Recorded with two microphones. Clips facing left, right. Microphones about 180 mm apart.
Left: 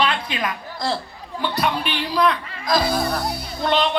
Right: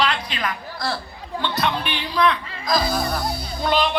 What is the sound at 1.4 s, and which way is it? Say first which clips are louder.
A man's voice: left 1 dB; 10° left (ahead or behind).